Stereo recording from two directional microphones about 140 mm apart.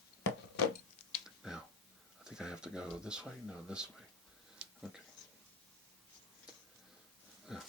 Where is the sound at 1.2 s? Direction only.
5° right (ahead or behind).